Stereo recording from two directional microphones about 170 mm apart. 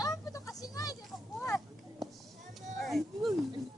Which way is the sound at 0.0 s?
20° left (ahead or behind).